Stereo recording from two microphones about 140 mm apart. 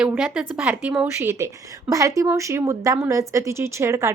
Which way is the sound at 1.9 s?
20° right (ahead or behind).